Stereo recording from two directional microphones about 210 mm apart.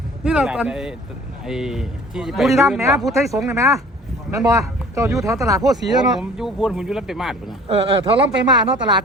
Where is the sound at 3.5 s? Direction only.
15° right (ahead or behind).